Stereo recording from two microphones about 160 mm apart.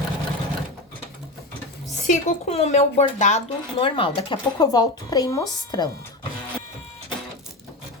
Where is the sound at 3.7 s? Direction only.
35° left (ahead or behind).